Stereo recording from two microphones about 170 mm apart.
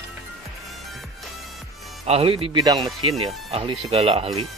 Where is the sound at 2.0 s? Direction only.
35° right (ahead or behind).